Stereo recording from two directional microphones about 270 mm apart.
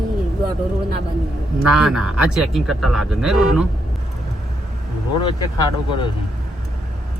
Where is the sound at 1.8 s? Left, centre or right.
Centre.